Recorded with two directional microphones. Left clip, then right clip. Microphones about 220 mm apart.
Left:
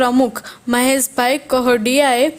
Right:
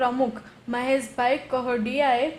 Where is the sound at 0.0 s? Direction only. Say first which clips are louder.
Left 8 dB; 50° left (ahead or behind).